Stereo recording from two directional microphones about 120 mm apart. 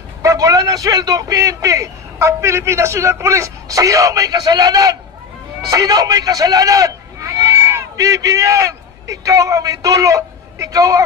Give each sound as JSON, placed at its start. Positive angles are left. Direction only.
{"t": 0.2, "sound": "a man's voice", "side_deg": -25}